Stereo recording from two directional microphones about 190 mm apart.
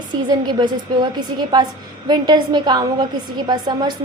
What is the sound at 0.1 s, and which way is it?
A woman's voice, 25° right (ahead or behind).